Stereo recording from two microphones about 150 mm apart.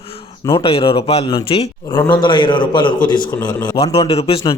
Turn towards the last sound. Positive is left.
turn(degrees=40)  # may be behind; listen again after turning